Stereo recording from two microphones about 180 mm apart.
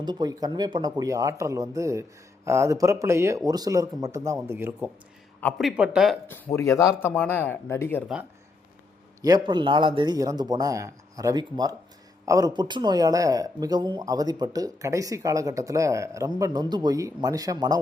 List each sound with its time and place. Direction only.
0.0 s speech: 25° right (ahead or behind)
5.5 s speech: 5° right (ahead or behind)
6.2 s speech: 10° left (ahead or behind)
9.2 s speech: 25° right (ahead or behind)